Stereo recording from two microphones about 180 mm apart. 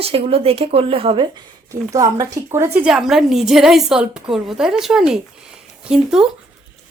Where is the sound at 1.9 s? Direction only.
20° right (ahead or behind); by 6.3 s 5° right (ahead or behind).